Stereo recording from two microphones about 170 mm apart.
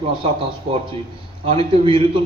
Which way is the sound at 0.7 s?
35° right (ahead or behind).